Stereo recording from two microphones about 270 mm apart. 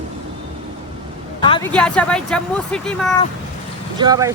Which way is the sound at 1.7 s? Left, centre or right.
Centre.